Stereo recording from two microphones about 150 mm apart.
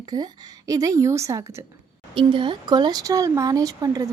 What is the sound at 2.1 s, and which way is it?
A woman's voice, 35° right (ahead or behind).